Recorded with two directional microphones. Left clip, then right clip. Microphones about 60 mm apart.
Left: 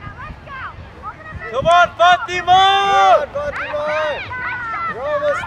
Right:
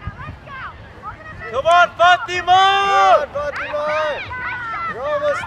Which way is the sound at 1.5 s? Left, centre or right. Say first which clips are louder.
Left 1 dB; right.